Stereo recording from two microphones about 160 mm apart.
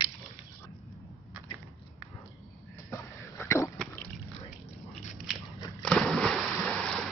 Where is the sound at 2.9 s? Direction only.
15° left (ahead or behind).